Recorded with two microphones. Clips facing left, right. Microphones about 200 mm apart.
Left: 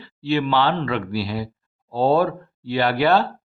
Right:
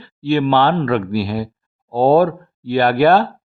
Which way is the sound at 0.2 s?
50° right (ahead or behind).